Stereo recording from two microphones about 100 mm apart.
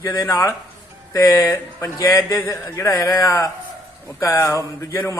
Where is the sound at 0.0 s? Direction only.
35° left (ahead or behind).